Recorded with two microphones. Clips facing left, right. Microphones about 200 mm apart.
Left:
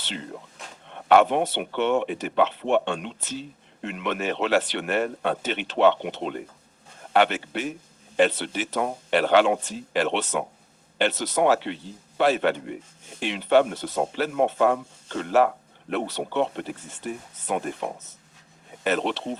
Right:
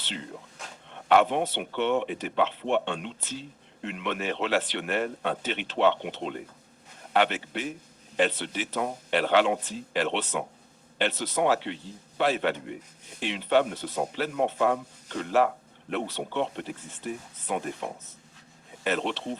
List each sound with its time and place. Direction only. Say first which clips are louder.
1.0 s speech: left 4 dB; 55° left (ahead or behind)
1.9 s speech: left 3 dB; 50° left (ahead or behind)
2.1 s speech: left 4 dB; 60° left (ahead or behind)
3.8 s speech: left 3 dB; 60° left (ahead or behind)
8.8 s speech: left 4 dB; 65° left (ahead or behind); by 14.0 s 80° left
14.2 s speech: left 4 dB; 65° left (ahead or behind)
15.9 s speech: left 3 dB; 70° left (ahead or behind)
18.9 s speech: left 4 dB; 70° left (ahead or behind)